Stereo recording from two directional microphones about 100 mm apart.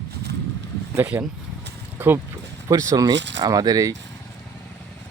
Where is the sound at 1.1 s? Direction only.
15° right (ahead or behind).